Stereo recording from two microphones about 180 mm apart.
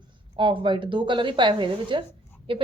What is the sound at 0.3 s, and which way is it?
A woman's voice, 30° right (ahead or behind).